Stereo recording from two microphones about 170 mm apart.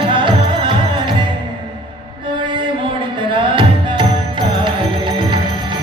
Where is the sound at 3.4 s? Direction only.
30° right (ahead or behind).